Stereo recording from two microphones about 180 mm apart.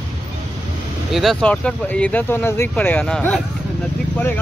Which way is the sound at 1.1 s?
Centre (ahead or behind).